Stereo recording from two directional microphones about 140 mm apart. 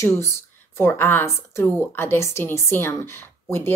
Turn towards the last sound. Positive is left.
turn(degrees=15)  # may be behind; listen again after turning